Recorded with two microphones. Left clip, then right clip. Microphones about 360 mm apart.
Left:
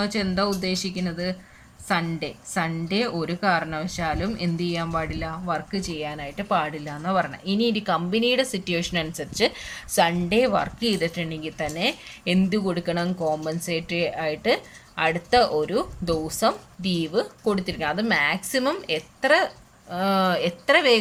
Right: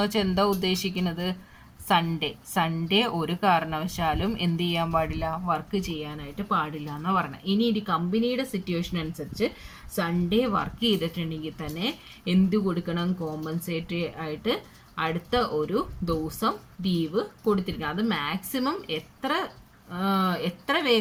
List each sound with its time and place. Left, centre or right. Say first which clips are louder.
0.0 s a woman's voice: even; centre